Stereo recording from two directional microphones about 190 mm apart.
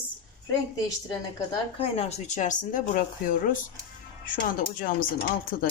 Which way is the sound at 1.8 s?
30° left (ahead or behind).